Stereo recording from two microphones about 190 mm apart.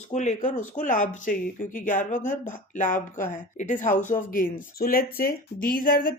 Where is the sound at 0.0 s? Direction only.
35° left (ahead or behind).